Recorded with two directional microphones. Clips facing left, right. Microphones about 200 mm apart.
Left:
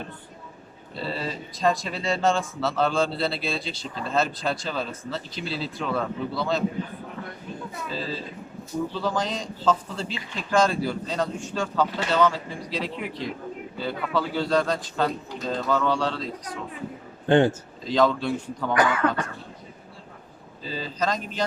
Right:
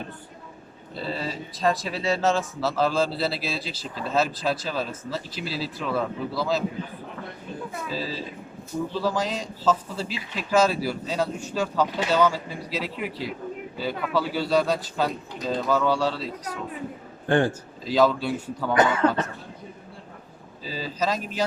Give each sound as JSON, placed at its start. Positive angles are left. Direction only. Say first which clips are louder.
{"t": 0.9, "sound": "speech", "louder": "even", "side_deg": 0}
{"t": 7.9, "sound": "a man's voice", "louder": "left 1 dB", "side_deg": -5}
{"t": 17.2, "sound": "a man's voice", "louder": "left 3 dB", "side_deg": 20}
{"t": 17.8, "sound": "a man's voice", "louder": "right 1 dB", "side_deg": -5}
{"t": 18.7, "sound": "speech", "louder": "right 2 dB", "side_deg": -25}
{"t": 20.7, "sound": "a man's voice", "louder": "even", "side_deg": -5}